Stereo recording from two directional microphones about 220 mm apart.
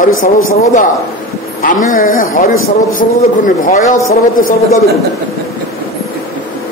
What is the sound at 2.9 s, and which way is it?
Speech, 35° left (ahead or behind).